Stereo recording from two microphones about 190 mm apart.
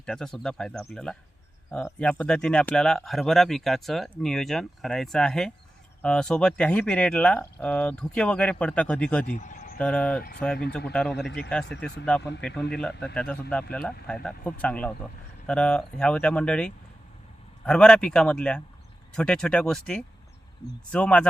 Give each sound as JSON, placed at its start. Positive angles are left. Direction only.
{"t": 0.0, "sound": "speech", "side_deg": 5}
{"t": 9.2, "sound": "speech", "side_deg": 40}
{"t": 9.7, "sound": "speech", "side_deg": 5}